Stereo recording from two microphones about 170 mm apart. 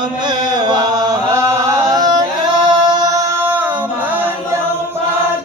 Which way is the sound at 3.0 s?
20° right (ahead or behind).